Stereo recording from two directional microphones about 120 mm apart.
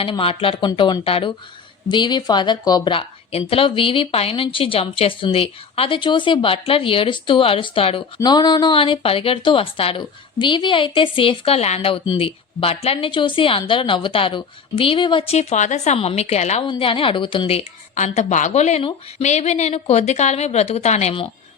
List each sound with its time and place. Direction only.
0.0 s speech: 50° left (ahead or behind)
8.2 s speech: 35° left (ahead or behind); by 16.6 s 65° left (ahead or behind)
16.6 s a woman's voice: 45° left (ahead or behind); by 21.2 s 70° left (ahead or behind)